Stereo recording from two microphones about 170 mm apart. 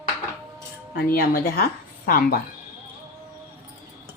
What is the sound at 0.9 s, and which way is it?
Speech, 65° left (ahead or behind).